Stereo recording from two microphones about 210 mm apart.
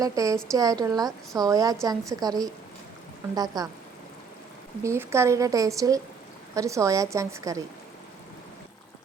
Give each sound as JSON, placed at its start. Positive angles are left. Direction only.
{"t": 0.0, "sound": "a woman's voice", "side_deg": -15}
{"t": 4.8, "sound": "a woman's voice", "side_deg": -15}